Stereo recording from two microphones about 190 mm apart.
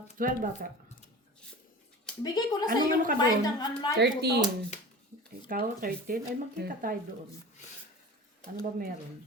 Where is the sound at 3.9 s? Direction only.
60° right (ahead or behind).